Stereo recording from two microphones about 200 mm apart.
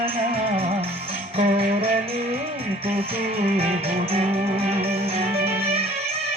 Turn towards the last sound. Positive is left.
turn(degrees=-30)  # may be behind; listen again after turning